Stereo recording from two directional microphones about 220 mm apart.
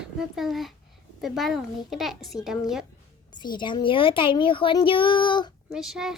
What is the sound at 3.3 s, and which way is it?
A child's voice, 20° left (ahead or behind).